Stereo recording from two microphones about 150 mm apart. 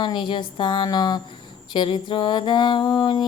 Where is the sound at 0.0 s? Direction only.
30° left (ahead or behind).